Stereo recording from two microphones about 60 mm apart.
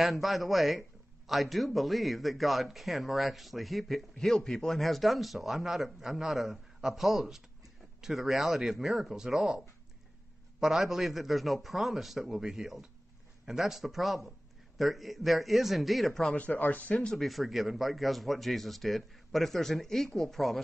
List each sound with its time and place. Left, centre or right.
0.0 s speech: centre
10.6 s speech: centre
16.3 s speech: left
17.0 s speech: centre